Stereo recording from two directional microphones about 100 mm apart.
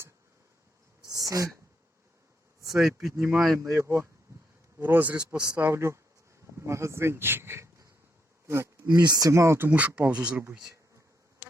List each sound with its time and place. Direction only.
1.1 s a sound: 35° right (ahead or behind)
2.6 s speech: 5° right (ahead or behind)
3.6 s speech: 30° right (ahead or behind)
8.9 s speech: 45° right (ahead or behind); by 10.8 s 5° right (ahead or behind)